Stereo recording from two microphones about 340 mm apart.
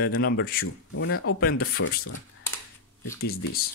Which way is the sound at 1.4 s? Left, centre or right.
Left.